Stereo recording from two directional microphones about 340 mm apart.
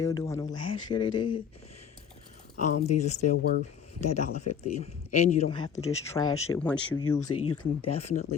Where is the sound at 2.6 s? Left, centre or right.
Left.